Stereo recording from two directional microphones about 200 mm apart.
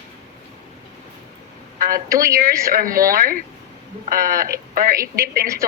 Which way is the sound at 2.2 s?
45° right (ahead or behind).